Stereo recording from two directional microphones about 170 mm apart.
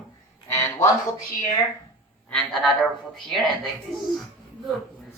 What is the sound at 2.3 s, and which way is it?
A woman's voice, centre (ahead or behind).